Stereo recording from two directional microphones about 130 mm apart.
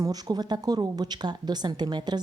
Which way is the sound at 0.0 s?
30° right (ahead or behind).